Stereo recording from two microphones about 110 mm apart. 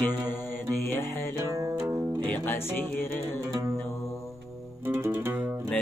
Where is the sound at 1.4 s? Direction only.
30° right (ahead or behind).